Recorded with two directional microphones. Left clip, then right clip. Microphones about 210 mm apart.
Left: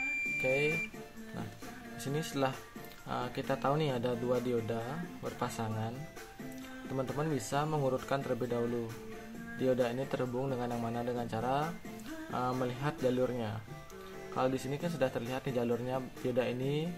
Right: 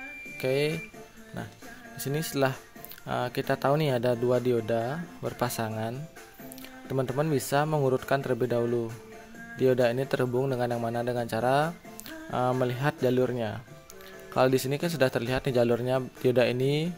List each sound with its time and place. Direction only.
0.4 s speech: 40° right (ahead or behind)
2.1 s speech: 40° right (ahead or behind)
7.0 s speech: 40° right (ahead or behind)